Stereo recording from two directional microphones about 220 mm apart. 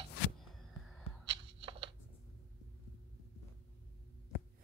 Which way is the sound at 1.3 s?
25° right (ahead or behind).